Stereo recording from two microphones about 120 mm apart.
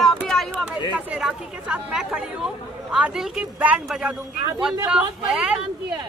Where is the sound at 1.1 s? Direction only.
10° right (ahead or behind).